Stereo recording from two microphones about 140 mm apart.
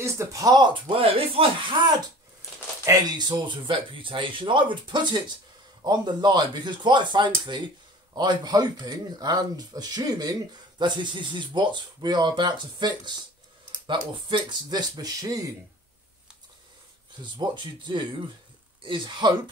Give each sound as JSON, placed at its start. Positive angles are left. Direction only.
{"t": 0.0, "sound": "speech", "side_deg": -20}
{"t": 2.8, "sound": "speech", "side_deg": -25}
{"t": 17.2, "sound": "speech", "side_deg": -35}